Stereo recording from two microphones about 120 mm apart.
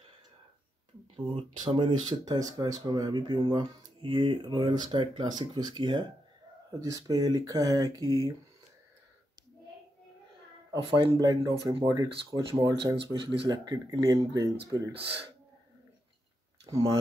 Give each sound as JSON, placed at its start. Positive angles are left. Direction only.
{"t": 1.1, "sound": "speech", "side_deg": -50}
{"t": 6.7, "sound": "speech", "side_deg": -30}
{"t": 10.7, "sound": "speech", "side_deg": -40}
{"t": 12.9, "sound": "speech", "side_deg": -50}
{"t": 13.5, "sound": "speech", "side_deg": -30}